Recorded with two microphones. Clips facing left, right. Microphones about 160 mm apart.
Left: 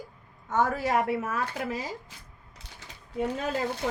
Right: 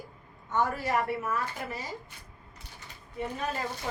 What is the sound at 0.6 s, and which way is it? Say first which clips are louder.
Speech: left 3 dB; 90° left.